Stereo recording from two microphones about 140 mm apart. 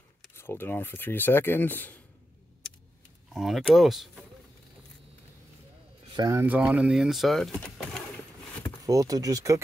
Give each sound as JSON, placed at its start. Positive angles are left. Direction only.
{"t": 0.3, "sound": "speech", "side_deg": 15}
{"t": 3.3, "sound": "speech", "side_deg": 0}
{"t": 6.1, "sound": "speech", "side_deg": -25}
{"t": 6.4, "sound": "speech", "side_deg": -10}
{"t": 8.8, "sound": "speech", "side_deg": -25}